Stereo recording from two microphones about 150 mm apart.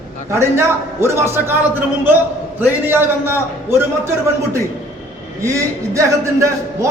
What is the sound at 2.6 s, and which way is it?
A man's voice, 15° right (ahead or behind).